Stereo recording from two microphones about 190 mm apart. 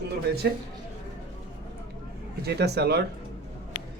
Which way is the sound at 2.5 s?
60° right (ahead or behind).